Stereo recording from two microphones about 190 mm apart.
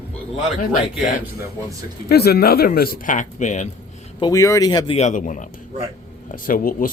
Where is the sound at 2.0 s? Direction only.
55° left (ahead or behind); by 3.7 s 40° left (ahead or behind).